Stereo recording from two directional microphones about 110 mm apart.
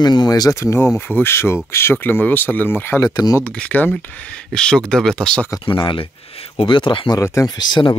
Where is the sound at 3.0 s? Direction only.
35° left (ahead or behind).